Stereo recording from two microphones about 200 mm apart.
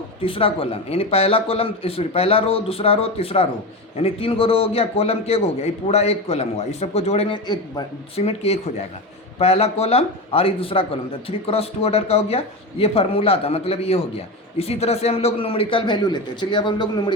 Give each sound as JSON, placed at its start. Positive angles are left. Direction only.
{"t": 0.2, "sound": "a man's voice", "side_deg": 25}